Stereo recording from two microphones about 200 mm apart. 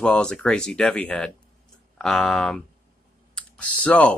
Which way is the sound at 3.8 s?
5° left (ahead or behind).